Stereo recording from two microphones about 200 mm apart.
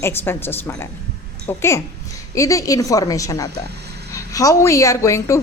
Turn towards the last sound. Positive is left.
turn(degrees=15)  # may be behind; listen again after turning